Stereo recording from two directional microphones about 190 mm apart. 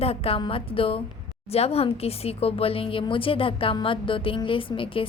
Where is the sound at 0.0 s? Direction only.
30° left (ahead or behind).